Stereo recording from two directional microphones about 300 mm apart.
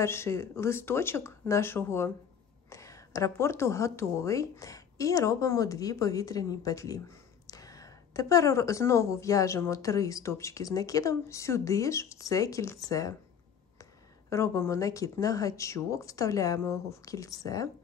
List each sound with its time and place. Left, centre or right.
0.0 s speech: centre
14.3 s speech: centre